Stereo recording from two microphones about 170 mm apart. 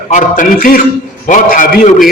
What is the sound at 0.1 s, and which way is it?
A man's voice, 50° left (ahead or behind).